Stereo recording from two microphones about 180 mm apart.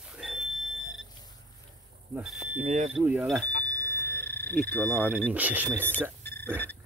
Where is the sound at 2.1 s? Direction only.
Centre (ahead or behind).